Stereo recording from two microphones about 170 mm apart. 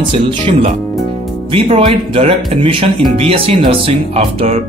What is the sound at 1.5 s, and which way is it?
Speech, 35° right (ahead or behind).